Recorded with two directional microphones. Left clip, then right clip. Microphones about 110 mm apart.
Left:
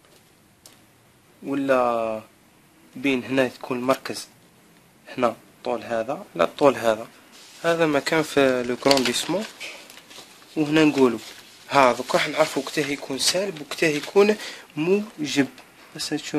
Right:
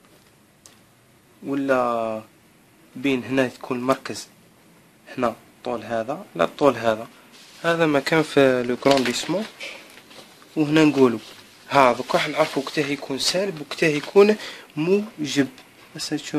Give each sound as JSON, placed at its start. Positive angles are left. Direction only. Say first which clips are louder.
{"t": 1.4, "sound": "speech", "louder": "even", "side_deg": 25}
{"t": 7.6, "sound": "speech", "louder": "right 1 dB", "side_deg": 5}
{"t": 8.9, "sound": "speech", "louder": "right 1 dB", "side_deg": 20}
{"t": 10.5, "sound": "speech", "louder": "right 1 dB", "side_deg": 10}